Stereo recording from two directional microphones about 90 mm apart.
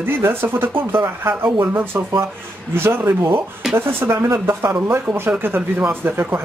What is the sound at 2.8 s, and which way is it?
Speech, 30° right (ahead or behind).